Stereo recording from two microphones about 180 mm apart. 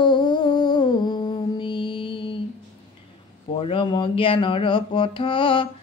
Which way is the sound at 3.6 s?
30° left (ahead or behind).